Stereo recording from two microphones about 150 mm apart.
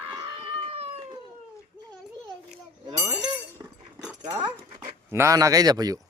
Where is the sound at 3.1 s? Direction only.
25° right (ahead or behind).